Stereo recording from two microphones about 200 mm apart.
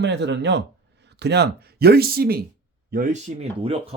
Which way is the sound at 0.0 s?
60° right (ahead or behind).